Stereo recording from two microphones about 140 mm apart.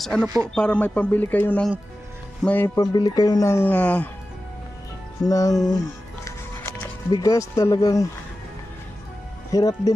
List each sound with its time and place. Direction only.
0.0 s speech: 5° left (ahead or behind)
0.3 s speech: 25° right (ahead or behind)
0.5 s speech: 5° left (ahead or behind)
2.7 s speech: 30° left (ahead or behind); by 4.1 s 10° left (ahead or behind)
5.2 s speech: 25° left (ahead or behind)
6.6 s music: 10° left (ahead or behind)
7.1 s speech: 25° left (ahead or behind)
9.5 s speech: 25° left (ahead or behind)